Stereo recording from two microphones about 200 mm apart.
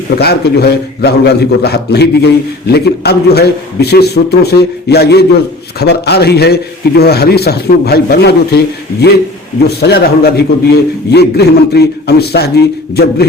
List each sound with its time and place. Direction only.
0.2 s a man's voice: 55° left (ahead or behind)